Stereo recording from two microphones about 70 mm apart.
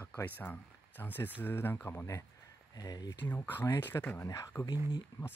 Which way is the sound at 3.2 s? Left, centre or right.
Left.